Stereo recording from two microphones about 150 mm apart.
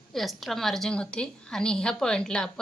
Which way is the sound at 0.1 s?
Centre (ahead or behind).